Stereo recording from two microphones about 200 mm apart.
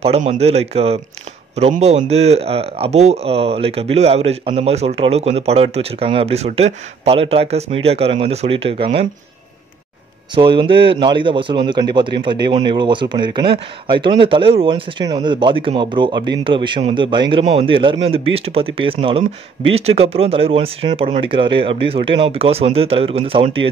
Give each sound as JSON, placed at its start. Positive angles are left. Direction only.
{"t": 0.0, "sound": "a man's voice", "side_deg": -30}
{"t": 10.3, "sound": "a man's voice", "side_deg": -25}